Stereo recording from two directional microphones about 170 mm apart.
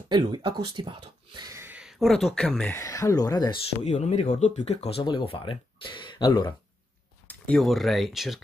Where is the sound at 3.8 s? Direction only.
40° left (ahead or behind); by 6.6 s 25° left (ahead or behind).